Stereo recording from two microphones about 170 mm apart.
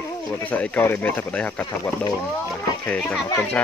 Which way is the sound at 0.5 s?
10° left (ahead or behind).